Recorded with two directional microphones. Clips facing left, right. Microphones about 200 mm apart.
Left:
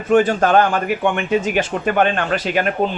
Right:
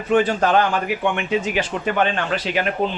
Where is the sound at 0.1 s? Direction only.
45° left (ahead or behind).